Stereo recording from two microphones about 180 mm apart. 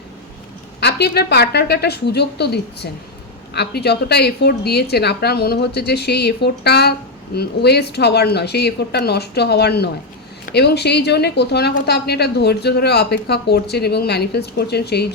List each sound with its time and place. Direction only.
0.8 s a woman's voice: 65° left (ahead or behind)